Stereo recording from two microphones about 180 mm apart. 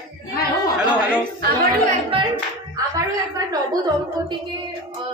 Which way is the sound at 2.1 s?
30° right (ahead or behind).